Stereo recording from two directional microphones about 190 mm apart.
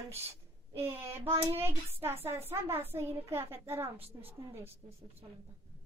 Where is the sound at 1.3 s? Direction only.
30° right (ahead or behind).